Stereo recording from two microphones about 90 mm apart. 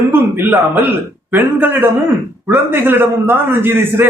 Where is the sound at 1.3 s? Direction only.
25° right (ahead or behind).